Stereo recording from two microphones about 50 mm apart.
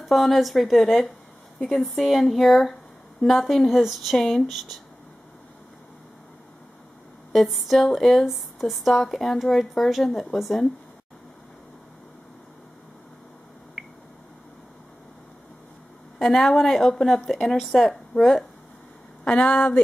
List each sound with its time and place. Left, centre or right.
0.0 s speech: centre
7.3 s speech: centre
13.8 s a sound: centre
16.2 s a woman's voice: centre
19.2 s speech: left